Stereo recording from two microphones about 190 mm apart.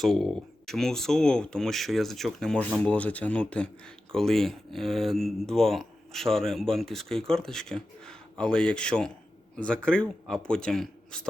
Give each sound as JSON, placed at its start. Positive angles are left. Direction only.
{"t": 0.0, "sound": "speech", "side_deg": 0}